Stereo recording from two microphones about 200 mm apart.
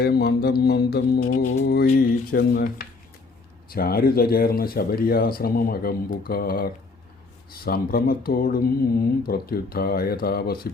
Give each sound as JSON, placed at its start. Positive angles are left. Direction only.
{"t": 0.0, "sound": "speech", "side_deg": 50}
{"t": 1.4, "sound": "music", "side_deg": 35}
{"t": 1.6, "sound": "speech", "side_deg": 50}